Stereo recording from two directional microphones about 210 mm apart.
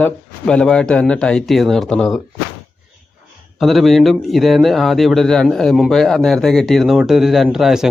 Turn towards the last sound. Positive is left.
turn(degrees=0)  # may be behind; listen again after turning